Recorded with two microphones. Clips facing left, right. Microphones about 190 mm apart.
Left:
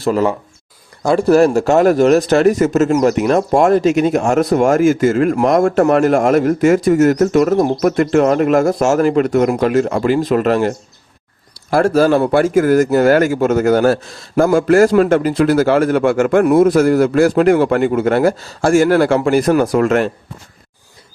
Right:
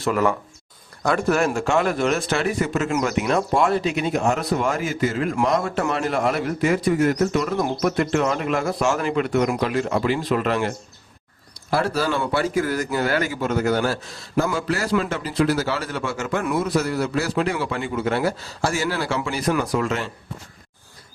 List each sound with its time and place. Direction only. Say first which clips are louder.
0.0 s speech: left 5 dB; 30° left (ahead or behind); by 20.1 s 55° left (ahead or behind)